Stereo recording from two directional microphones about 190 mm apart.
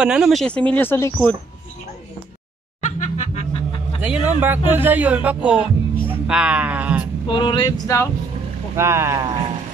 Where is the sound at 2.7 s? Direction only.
40° left (ahead or behind).